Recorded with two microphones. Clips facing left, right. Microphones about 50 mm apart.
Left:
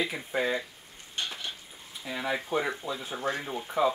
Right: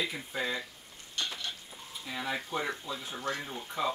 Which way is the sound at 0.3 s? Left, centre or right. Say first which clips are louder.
Left 8 dB; left.